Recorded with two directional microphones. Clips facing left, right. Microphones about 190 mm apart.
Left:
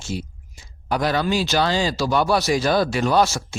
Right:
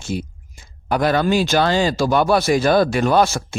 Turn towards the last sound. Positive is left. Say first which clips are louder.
# right 3 dB
turn(degrees=-55)  # may be behind; listen again after turning